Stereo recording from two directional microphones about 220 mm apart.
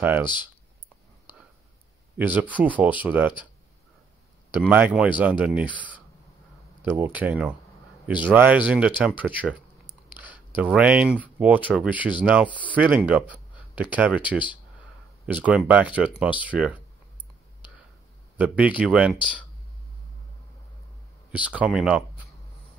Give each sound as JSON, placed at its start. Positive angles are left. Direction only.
{"t": 0.0, "sound": "speech", "side_deg": -10}
{"t": 2.1, "sound": "speech", "side_deg": -5}
{"t": 4.6, "sound": "speech", "side_deg": -5}
{"t": 9.8, "sound": "a sound", "side_deg": 20}
{"t": 10.2, "sound": "speech", "side_deg": -5}
{"t": 18.4, "sound": "speech", "side_deg": -5}
{"t": 21.3, "sound": "speech", "side_deg": -5}